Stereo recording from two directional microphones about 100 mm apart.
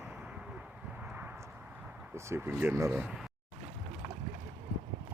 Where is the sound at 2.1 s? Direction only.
25° right (ahead or behind).